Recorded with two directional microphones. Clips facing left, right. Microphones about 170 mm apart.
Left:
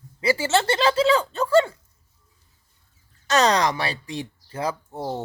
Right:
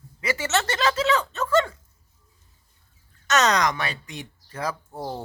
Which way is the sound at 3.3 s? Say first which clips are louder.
Left 2 dB; 30° left (ahead or behind).